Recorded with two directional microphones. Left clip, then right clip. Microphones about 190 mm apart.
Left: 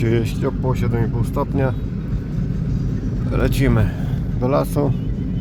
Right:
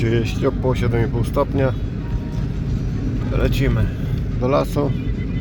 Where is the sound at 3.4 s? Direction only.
25° left (ahead or behind).